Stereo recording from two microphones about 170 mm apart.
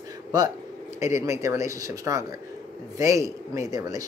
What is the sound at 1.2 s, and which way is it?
Speech, 20° right (ahead or behind).